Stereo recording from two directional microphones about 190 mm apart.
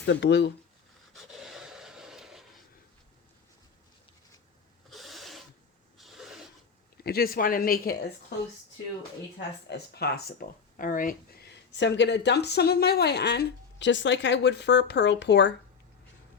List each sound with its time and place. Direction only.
0.0 s speech: 65° left (ahead or behind)
1.1 s a sound: centre (ahead or behind)
4.9 s a sound: centre (ahead or behind)
6.0 s filing: centre (ahead or behind)
6.9 s a woman's voice: 55° left (ahead or behind)
8.3 s speech: 60° left (ahead or behind)
9.6 s speech: 60° left (ahead or behind)
10.8 s speech: 45° left (ahead or behind); by 15.5 s 65° left (ahead or behind)